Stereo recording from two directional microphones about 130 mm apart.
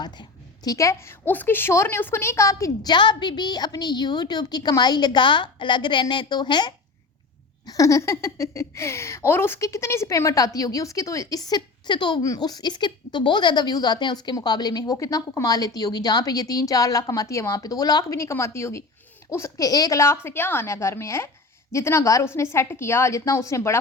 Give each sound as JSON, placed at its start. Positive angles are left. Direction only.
{"t": 0.0, "sound": "a woman's voice", "side_deg": 30}
{"t": 7.7, "sound": "speech", "side_deg": 25}